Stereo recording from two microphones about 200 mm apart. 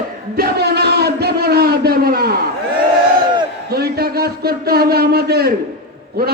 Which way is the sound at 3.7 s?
50° right (ahead or behind).